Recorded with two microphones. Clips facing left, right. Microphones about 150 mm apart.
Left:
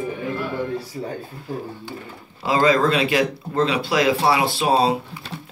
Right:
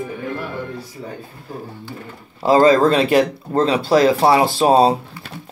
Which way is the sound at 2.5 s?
40° right (ahead or behind).